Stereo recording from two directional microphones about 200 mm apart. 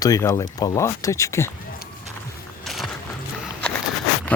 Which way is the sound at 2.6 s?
Centre (ahead or behind).